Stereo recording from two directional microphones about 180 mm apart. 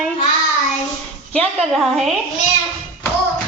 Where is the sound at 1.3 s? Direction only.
5° left (ahead or behind).